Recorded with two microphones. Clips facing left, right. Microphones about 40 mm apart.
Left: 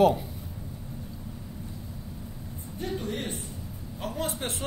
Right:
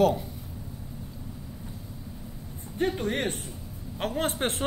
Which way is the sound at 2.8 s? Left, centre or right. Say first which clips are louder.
Right 5 dB; right.